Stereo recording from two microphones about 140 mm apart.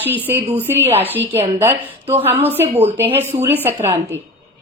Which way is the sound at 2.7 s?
45° right (ahead or behind).